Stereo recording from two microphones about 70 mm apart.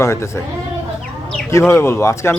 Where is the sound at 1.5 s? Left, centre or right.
Left.